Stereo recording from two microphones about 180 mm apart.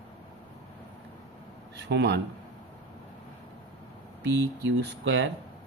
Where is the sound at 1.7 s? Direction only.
70° right (ahead or behind).